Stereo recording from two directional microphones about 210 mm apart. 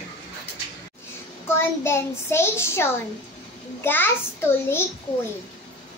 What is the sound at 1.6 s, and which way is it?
A child's voice, 10° left (ahead or behind).